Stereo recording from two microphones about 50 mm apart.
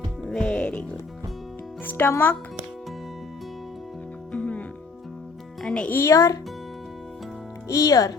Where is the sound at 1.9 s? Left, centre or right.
Left.